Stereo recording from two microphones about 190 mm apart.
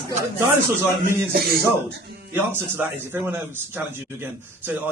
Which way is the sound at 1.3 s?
55° right (ahead or behind).